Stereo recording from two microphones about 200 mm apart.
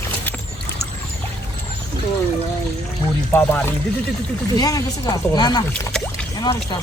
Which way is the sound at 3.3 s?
10° left (ahead or behind).